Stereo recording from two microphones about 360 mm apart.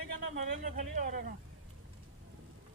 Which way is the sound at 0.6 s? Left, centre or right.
Right.